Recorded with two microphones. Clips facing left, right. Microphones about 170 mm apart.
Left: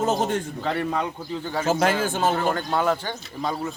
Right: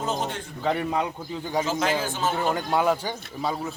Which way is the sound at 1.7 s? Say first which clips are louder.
Left 4 dB; 50° left (ahead or behind).